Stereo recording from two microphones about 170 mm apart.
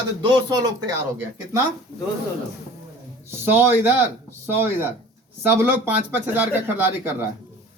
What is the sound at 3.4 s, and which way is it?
Speech, 15° right (ahead or behind).